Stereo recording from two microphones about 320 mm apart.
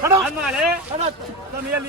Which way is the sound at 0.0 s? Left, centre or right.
Centre.